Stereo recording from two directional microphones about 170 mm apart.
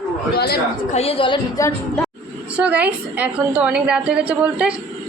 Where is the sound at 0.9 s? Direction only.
35° left (ahead or behind).